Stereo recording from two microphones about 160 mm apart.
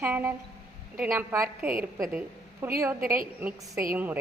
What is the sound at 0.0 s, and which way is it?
A woman's voice, 10° right (ahead or behind).